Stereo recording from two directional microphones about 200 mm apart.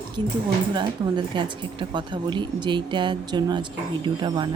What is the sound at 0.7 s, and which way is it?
Speech, 20° right (ahead or behind).